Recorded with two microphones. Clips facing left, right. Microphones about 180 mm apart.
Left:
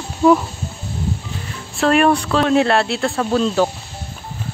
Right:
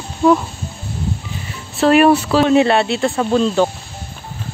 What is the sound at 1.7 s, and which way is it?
Speech, 5° right (ahead or behind).